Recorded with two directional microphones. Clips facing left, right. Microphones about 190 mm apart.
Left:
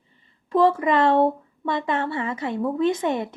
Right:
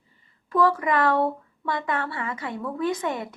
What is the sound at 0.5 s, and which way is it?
Speech, 25° left (ahead or behind).